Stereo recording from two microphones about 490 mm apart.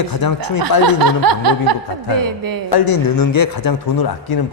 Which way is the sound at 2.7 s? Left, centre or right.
Left.